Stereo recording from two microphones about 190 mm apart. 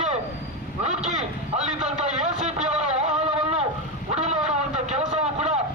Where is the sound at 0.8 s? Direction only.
40° right (ahead or behind).